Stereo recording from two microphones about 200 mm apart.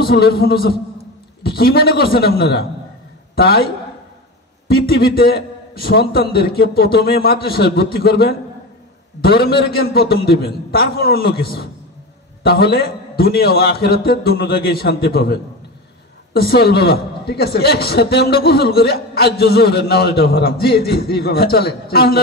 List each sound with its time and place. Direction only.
0.0 s a man's voice: 50° left (ahead or behind)
4.6 s a man's voice: 50° left (ahead or behind)